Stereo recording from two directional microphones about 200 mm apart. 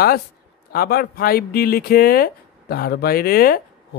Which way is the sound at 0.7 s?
50° left (ahead or behind).